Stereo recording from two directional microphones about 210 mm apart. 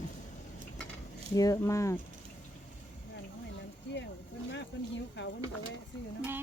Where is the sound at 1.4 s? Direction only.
15° left (ahead or behind).